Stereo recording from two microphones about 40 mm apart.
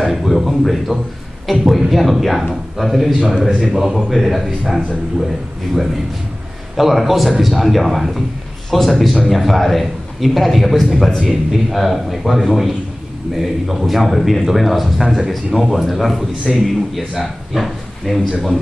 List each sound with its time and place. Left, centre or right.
0.0 s a man's voice: centre
6.8 s a man's voice: centre